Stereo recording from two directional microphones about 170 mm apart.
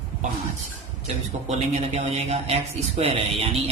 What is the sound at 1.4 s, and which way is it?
A man's voice, 40° right (ahead or behind).